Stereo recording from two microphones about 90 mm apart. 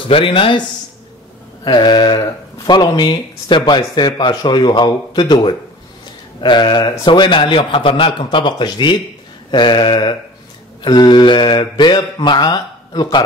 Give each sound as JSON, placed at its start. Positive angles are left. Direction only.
{"t": 0.1, "sound": "speech", "side_deg": 75}
{"t": 1.6, "sound": "speech", "side_deg": 55}